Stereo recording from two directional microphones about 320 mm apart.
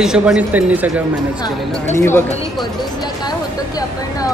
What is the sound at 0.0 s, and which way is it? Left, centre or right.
A man's voice, centre.